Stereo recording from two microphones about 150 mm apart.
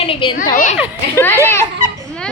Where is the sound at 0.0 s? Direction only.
35° left (ahead or behind).